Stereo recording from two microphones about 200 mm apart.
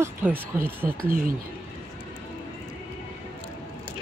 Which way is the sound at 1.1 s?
45° right (ahead or behind).